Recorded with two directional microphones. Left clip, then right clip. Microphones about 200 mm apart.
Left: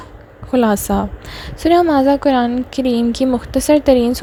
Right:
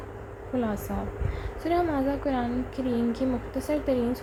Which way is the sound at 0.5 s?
55° left (ahead or behind).